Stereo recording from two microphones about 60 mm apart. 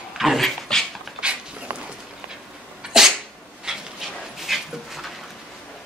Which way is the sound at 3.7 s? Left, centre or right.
Centre.